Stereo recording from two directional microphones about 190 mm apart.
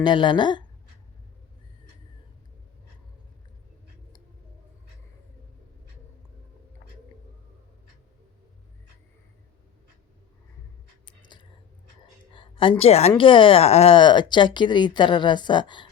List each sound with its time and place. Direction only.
0.0 s a woman's voice: 25° left (ahead or behind)
11.0 s a sound: 25° left (ahead or behind)
12.3 s a woman's voice: 25° left (ahead or behind)